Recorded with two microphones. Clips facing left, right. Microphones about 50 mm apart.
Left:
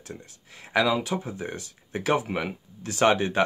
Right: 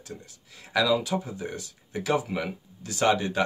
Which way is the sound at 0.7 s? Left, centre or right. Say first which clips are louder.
Even; left.